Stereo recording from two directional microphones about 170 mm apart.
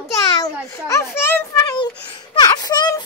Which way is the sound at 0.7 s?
15° left (ahead or behind).